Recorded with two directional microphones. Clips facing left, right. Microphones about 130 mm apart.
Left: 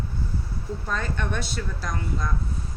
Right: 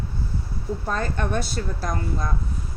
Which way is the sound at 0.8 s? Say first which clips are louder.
Right 3 dB; 40° right (ahead or behind).